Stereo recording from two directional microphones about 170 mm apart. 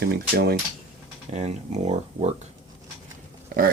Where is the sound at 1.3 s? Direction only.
40° right (ahead or behind).